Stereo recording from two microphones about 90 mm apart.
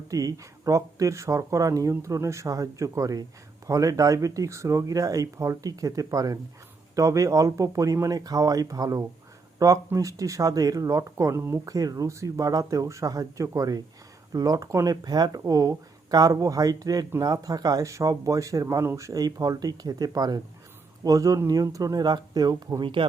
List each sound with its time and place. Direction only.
0.1 s speech: 40° right (ahead or behind); by 23.0 s 65° right (ahead or behind)